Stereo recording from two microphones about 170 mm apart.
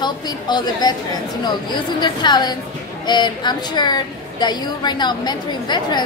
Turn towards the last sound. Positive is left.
turn(degrees=25)  # may be behind; listen again after turning